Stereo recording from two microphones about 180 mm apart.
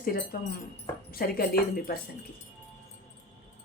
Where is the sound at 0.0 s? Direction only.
55° left (ahead or behind).